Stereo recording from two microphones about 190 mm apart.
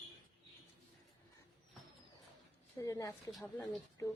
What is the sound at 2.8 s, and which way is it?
Speech, 20° left (ahead or behind).